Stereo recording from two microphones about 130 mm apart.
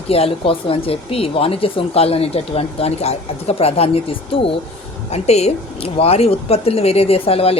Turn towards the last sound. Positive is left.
turn(degrees=50)  # may be behind; listen again after turning